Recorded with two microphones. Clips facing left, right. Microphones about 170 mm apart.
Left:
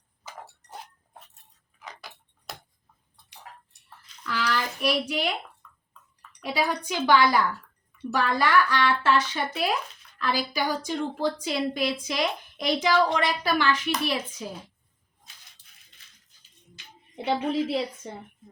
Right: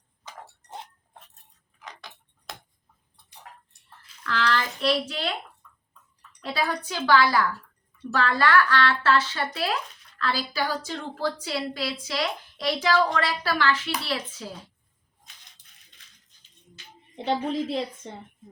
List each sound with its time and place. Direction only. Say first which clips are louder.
1.8 s tick-tock: even; 5° left (ahead or behind)
3.2 s tick-tock: left 1 dB; 75° left (ahead or behind)
4.2 s speech: right 2 dB; 10° left (ahead or behind)
6.4 s a woman's voice: left 1 dB; 15° left (ahead or behind)
17.2 s a woman's voice: left 1 dB; 5° left (ahead or behind)